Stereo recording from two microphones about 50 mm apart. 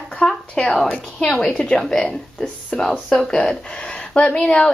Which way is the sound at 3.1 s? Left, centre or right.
Left.